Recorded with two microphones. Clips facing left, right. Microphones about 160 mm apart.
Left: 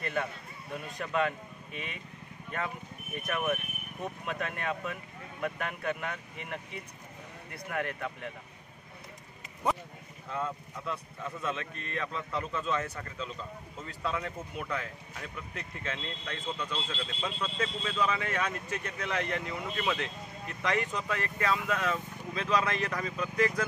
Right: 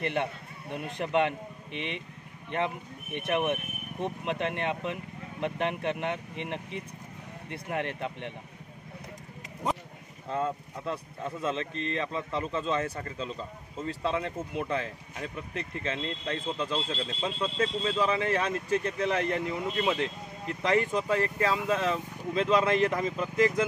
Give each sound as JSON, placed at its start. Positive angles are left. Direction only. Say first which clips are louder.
{"t": 0.0, "sound": "a man's voice", "louder": "right 4 dB", "side_deg": -25}
{"t": 10.3, "sound": "a man's voice", "louder": "right 5 dB", "side_deg": -35}